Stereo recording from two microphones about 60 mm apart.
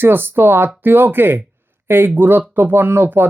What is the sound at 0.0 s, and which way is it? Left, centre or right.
Speech, right.